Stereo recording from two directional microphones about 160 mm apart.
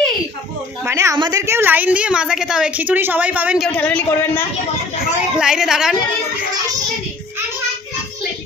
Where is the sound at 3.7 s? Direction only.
10° left (ahead or behind).